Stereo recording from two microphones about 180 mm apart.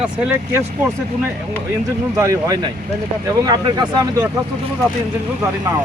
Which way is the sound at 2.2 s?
20° right (ahead or behind).